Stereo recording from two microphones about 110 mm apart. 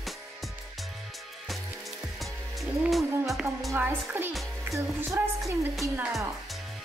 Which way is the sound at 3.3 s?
Centre (ahead or behind).